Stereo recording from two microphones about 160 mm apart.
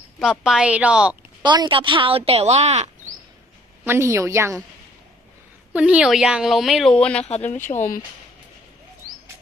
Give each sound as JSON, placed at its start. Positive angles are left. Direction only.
{"t": 0.2, "sound": "a woman's voice", "side_deg": -5}
{"t": 1.4, "sound": "speech", "side_deg": -25}
{"t": 3.8, "sound": "a woman's voice", "side_deg": -15}
{"t": 5.7, "sound": "speech", "side_deg": -5}
{"t": 7.3, "sound": "speech", "side_deg": 45}